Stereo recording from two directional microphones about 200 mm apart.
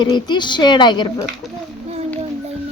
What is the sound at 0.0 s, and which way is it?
Speech, 20° left (ahead or behind).